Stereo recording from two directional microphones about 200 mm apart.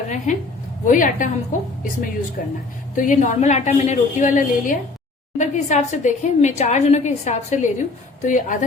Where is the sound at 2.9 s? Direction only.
40° left (ahead or behind).